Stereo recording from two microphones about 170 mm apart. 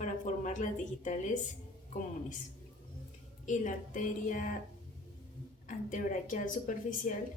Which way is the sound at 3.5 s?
50° left (ahead or behind).